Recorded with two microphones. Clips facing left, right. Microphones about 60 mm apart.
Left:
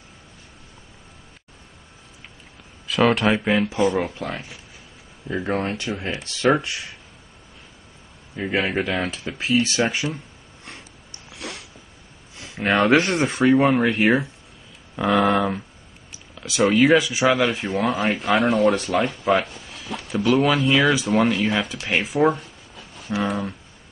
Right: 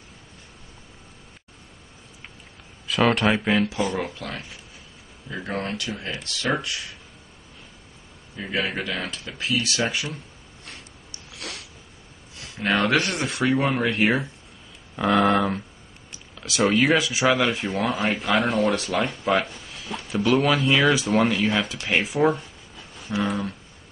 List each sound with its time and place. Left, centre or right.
2.9 s speech: centre
5.3 s speech: centre
8.4 s speech: centre
11.3 s a sound: left
12.6 s speech: centre
21.8 s a sound: centre
23.2 s speech: centre